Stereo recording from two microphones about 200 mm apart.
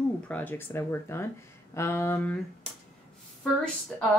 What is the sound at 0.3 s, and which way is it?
A woman's voice, 10° left (ahead or behind).